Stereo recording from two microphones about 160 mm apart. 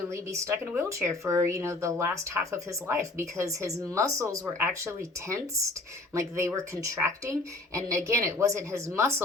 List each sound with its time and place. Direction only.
0.1 s speech: 15° right (ahead or behind)